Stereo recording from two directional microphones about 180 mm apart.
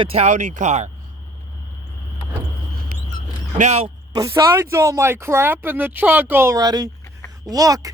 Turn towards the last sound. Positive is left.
turn(degrees=-20)  # may be behind; listen again after turning